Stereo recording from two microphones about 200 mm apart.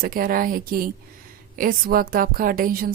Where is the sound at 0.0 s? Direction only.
45° right (ahead or behind).